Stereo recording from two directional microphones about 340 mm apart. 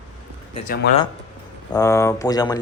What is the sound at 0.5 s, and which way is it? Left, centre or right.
Speech, left.